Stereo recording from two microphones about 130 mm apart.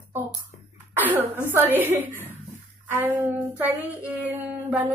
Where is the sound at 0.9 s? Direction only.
15° right (ahead or behind).